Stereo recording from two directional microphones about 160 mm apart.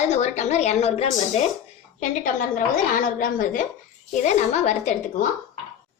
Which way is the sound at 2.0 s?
55° left (ahead or behind).